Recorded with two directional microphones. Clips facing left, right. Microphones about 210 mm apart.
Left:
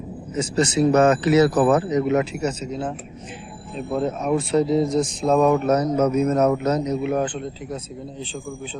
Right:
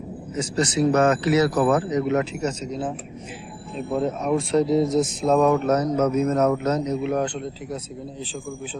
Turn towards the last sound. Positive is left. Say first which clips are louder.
# left 1 dB
turn(degrees=5)  # may be behind; listen again after turning